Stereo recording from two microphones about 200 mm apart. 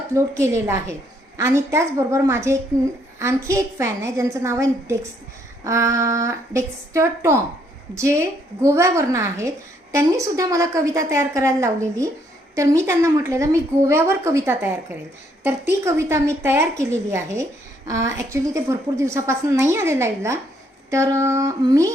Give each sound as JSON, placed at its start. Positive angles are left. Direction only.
{"t": 0.1, "sound": "a woman's voice", "side_deg": -15}